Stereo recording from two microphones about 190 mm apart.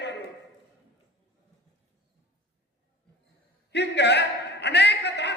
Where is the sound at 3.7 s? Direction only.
65° left (ahead or behind).